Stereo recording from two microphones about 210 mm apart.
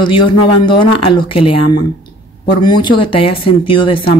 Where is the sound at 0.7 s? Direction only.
25° left (ahead or behind).